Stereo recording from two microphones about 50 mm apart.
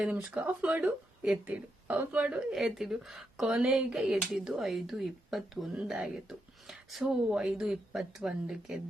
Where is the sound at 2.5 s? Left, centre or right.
Centre.